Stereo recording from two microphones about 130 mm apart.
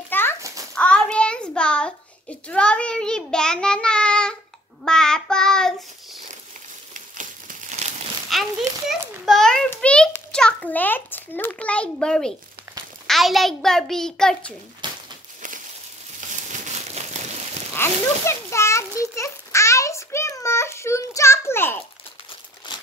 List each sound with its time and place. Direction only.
0.1 s a sound: 15° left (ahead or behind)
0.7 s child singing: 10° left (ahead or behind)
6.9 s crumpling: 80° right
8.3 s a child's voice: centre (ahead or behind)
14.8 s crumpling: 35° right (ahead or behind)
16.3 s crumpling: 70° right (ahead or behind)
17.7 s a sound: 20° left (ahead or behind)
22.7 s crumpling: 35° left (ahead or behind)